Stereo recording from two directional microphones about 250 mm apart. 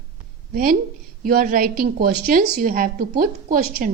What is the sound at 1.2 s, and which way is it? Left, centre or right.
Speech, right.